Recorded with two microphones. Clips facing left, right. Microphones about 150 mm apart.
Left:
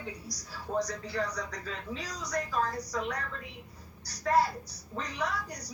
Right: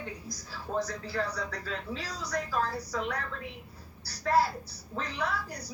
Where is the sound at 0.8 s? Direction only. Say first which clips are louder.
Even; 5° right (ahead or behind).